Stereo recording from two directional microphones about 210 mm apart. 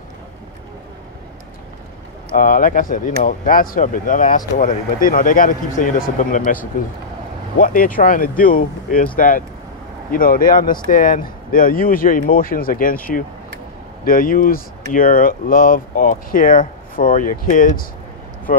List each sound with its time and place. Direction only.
2.3 s speech: 40° left (ahead or behind)